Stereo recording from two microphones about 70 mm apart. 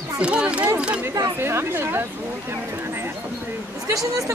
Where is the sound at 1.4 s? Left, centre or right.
Right.